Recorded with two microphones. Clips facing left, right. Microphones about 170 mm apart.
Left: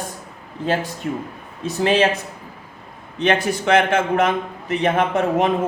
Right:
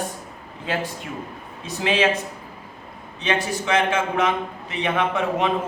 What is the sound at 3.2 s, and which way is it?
A man's voice, 55° left (ahead or behind).